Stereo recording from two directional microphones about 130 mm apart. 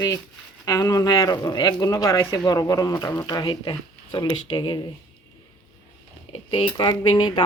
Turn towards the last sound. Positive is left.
turn(degrees=35)  # may be behind; listen again after turning